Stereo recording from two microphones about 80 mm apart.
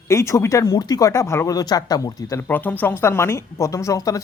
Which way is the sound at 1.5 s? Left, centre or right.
Left.